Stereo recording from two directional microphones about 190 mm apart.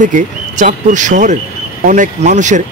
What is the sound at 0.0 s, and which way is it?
Speech, 40° right (ahead or behind).